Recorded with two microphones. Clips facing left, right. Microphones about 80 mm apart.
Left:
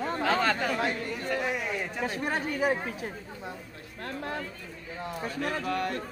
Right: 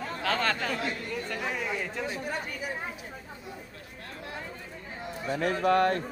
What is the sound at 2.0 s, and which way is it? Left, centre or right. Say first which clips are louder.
Speech: left 3 dB; left.